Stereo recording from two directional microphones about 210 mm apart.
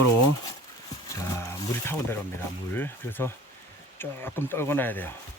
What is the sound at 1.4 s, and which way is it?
Speech, 10° left (ahead or behind).